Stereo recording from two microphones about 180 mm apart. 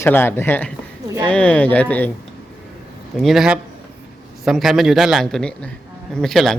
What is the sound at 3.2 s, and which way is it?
Speech, centre (ahead or behind).